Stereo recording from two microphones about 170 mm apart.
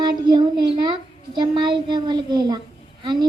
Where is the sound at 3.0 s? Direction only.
25° right (ahead or behind).